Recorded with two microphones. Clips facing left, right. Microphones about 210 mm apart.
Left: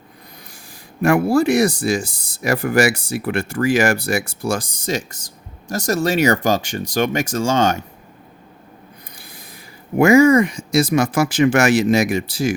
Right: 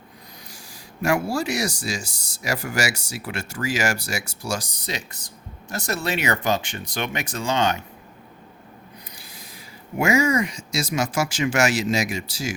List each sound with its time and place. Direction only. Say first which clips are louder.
1.0 s speech: left 8 dB; 55° left (ahead or behind)
10.0 s speech: left 9 dB; 55° left (ahead or behind)